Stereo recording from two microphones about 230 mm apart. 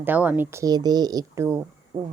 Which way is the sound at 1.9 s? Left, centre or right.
Centre.